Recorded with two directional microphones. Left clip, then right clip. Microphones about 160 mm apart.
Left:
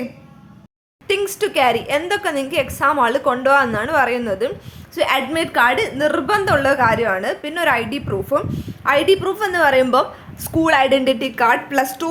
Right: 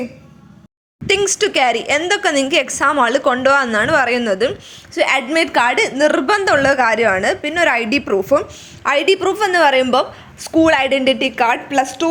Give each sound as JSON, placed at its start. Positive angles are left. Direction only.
{"t": 1.0, "sound": "a woman's voice", "side_deg": -20}
{"t": 8.4, "sound": "a woman's voice", "side_deg": -15}
{"t": 8.8, "sound": "a woman's voice", "side_deg": -30}
{"t": 9.8, "sound": "a woman's voice", "side_deg": -5}